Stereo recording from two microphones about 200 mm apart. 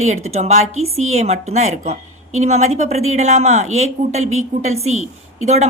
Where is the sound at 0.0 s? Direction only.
35° right (ahead or behind).